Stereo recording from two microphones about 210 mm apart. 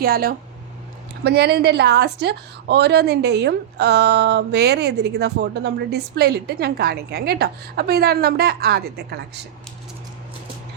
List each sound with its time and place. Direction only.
0.0 s a woman's voice: 45° right (ahead or behind)